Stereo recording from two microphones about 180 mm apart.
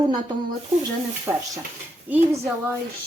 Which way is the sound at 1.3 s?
15° right (ahead or behind).